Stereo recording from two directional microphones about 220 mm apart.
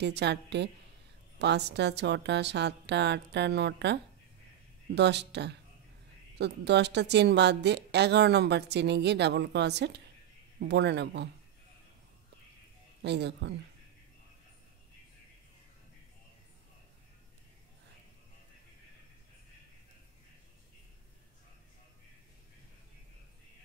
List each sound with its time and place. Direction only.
0.0 s a woman's voice: 50° right (ahead or behind)
13.0 s a woman's voice: 50° right (ahead or behind)